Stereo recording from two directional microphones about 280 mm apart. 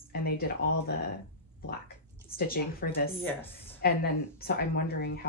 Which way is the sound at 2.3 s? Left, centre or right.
Left.